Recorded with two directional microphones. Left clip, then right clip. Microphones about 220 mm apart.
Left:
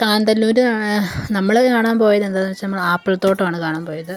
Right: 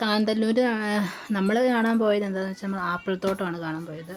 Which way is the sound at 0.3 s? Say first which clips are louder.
Left 9 dB; 25° left (ahead or behind).